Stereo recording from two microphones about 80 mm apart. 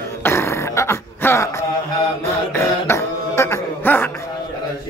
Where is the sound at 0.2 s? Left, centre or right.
Left.